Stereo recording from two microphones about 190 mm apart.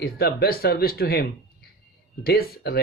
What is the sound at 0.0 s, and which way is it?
Speech, 55° left (ahead or behind).